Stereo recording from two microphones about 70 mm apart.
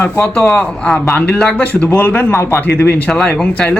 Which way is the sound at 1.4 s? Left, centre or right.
Centre.